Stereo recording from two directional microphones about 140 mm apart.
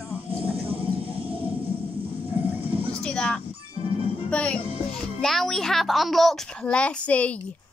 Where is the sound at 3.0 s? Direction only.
5° left (ahead or behind).